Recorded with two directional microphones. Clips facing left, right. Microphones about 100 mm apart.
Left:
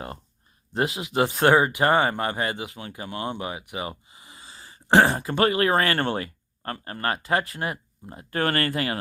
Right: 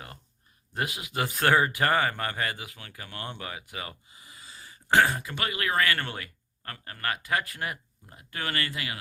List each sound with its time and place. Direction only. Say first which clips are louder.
0.7 s speech: left 7 dB; 25° left (ahead or behind)
8.4 s speech: left 8 dB; 45° left (ahead or behind)